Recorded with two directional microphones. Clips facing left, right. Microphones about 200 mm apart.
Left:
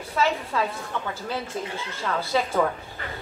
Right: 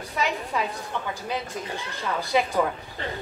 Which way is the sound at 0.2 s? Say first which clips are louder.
Left 3 dB; 15° right (ahead or behind).